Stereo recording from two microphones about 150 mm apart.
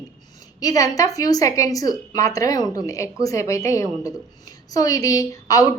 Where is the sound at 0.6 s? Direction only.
25° left (ahead or behind).